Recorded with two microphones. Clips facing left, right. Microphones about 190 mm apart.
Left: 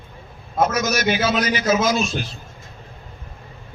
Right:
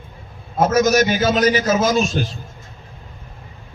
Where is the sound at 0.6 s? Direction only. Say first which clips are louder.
Right 5 dB; 40° right (ahead or behind).